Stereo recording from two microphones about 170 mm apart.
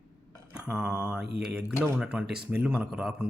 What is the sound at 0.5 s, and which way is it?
Speech, 5° right (ahead or behind).